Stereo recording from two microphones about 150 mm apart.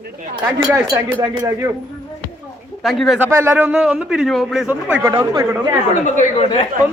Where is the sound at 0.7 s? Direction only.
20° right (ahead or behind).